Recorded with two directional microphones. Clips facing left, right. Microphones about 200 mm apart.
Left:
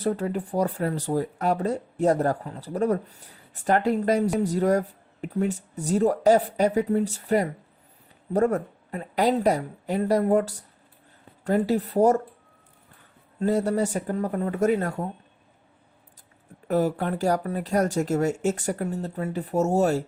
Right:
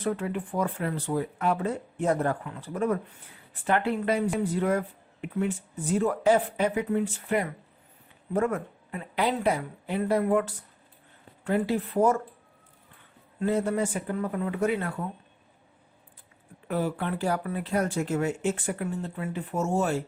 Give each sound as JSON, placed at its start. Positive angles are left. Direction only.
{"t": 0.0, "sound": "speech", "side_deg": 40}
{"t": 13.4, "sound": "speech", "side_deg": 40}
{"t": 16.6, "sound": "speech", "side_deg": 40}